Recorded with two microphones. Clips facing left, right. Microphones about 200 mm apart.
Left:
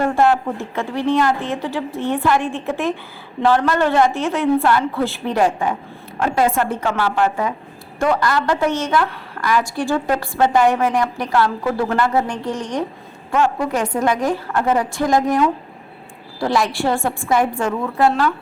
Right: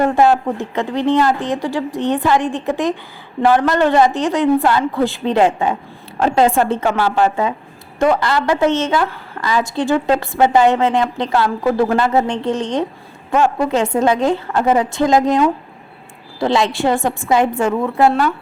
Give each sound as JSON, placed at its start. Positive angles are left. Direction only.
{"t": 0.0, "sound": "a woman's voice", "side_deg": -15}